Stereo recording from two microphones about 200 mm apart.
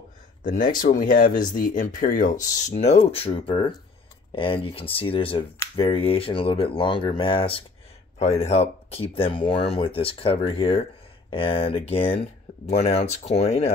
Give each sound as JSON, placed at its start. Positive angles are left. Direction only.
{"t": 0.4, "sound": "speech", "side_deg": 40}